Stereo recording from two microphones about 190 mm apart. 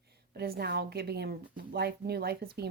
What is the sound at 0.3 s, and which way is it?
Speech, 55° right (ahead or behind).